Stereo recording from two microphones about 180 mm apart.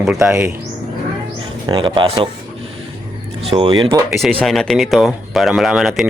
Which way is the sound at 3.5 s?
30° right (ahead or behind).